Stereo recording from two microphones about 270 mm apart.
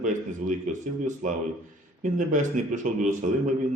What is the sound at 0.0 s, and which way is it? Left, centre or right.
Speech, right.